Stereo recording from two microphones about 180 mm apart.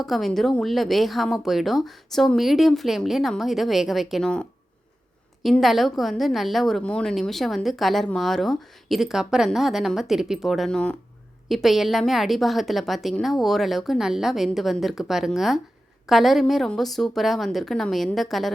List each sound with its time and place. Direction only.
0.0 s a woman's voice: centre (ahead or behind)